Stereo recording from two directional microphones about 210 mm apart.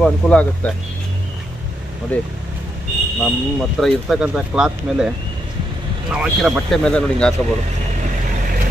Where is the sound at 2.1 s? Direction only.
5° left (ahead or behind).